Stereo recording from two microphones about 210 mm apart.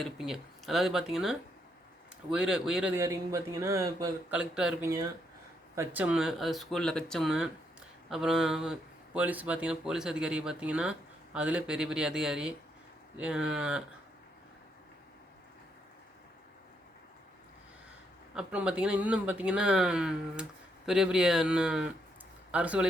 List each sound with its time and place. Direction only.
0.0 s a man's voice: centre (ahead or behind)
4.4 s speech: 5° right (ahead or behind)
18.3 s a man's voice: 5° right (ahead or behind)